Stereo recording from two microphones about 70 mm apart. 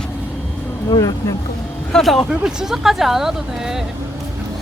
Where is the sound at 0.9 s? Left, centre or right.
Left.